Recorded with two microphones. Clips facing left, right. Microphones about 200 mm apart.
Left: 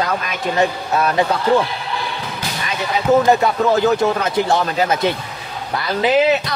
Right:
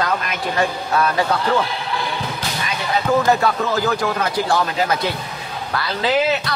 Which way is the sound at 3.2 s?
20° left (ahead or behind).